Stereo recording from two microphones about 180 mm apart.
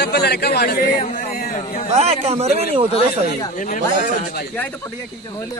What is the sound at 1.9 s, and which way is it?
Speech, 35° right (ahead or behind).